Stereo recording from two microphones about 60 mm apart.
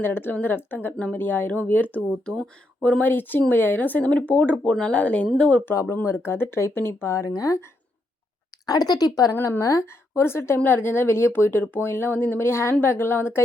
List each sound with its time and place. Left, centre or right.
0.0 s speech: left; by 5.6 s centre
5.7 s speech: left
6.2 s a woman's voice: left
7.2 s speech: left
8.6 s speech: left
9.3 s a woman's voice: left
9.6 s a woman's voice: left